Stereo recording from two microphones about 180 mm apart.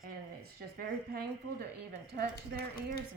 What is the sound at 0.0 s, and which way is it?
Speech, 55° right (ahead or behind).